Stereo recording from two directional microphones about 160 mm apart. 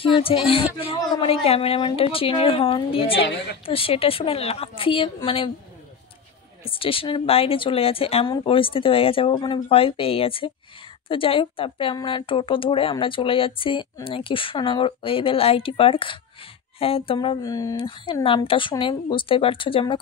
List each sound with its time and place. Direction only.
0.0 s a woman's voice: 35° left (ahead or behind)
6.6 s a woman's voice: 35° left (ahead or behind)
17.4 s speech: 20° left (ahead or behind)
17.7 s a woman's voice: 35° left (ahead or behind)